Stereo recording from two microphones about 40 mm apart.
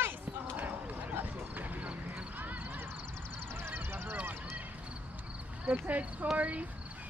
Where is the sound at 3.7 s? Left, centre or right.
Right.